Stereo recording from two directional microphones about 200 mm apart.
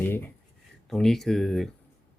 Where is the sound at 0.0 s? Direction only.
10° left (ahead or behind).